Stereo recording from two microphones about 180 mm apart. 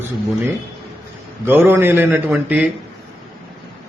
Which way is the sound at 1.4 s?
10° right (ahead or behind).